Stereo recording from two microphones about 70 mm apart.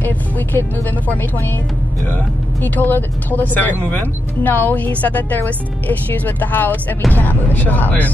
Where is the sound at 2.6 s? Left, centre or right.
Left.